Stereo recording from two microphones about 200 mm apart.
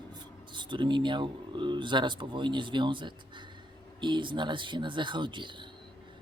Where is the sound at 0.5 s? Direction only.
25° right (ahead or behind).